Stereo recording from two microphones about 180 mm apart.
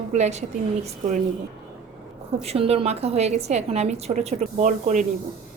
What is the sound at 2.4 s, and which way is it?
A woman's voice, 35° right (ahead or behind).